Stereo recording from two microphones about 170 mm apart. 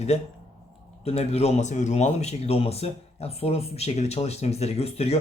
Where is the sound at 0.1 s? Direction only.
40° left (ahead or behind).